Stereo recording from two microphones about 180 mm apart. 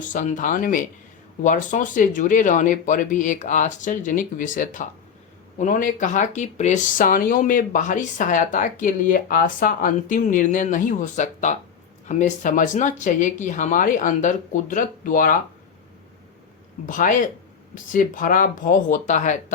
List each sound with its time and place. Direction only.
0.0 s speech: 45° left (ahead or behind)
16.8 s speech: 45° left (ahead or behind)